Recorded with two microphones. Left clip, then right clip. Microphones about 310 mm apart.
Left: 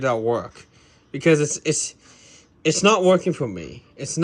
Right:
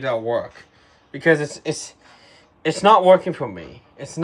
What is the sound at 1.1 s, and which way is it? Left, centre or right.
Speech, centre.